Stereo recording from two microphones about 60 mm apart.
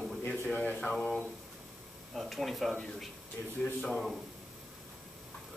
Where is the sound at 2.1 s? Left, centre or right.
Centre.